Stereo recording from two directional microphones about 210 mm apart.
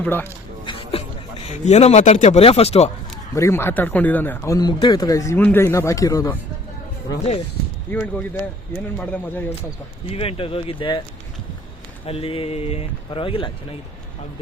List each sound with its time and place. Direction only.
0.0 s speech: 10° left (ahead or behind)
0.6 s a sound: 25° left (ahead or behind)
1.5 s speech: 30° left (ahead or behind)
3.3 s speech: 15° left (ahead or behind)
7.9 s speech: 10° left (ahead or behind)
10.1 s speech: 25° left (ahead or behind)
12.0 s speech: 25° left (ahead or behind)